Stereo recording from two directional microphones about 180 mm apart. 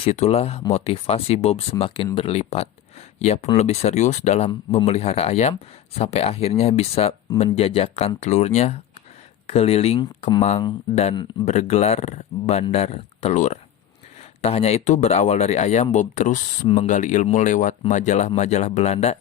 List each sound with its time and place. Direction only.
0.0 s speech: 35° left (ahead or behind)